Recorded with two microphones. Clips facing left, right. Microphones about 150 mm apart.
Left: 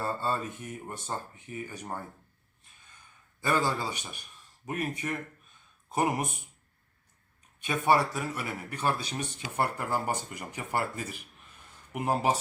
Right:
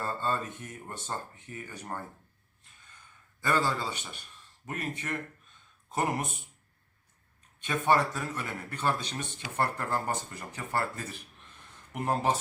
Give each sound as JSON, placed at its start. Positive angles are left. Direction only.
{"t": 0.0, "sound": "speech", "side_deg": 10}
{"t": 3.4, "sound": "speech", "side_deg": 10}
{"t": 7.6, "sound": "speech", "side_deg": 10}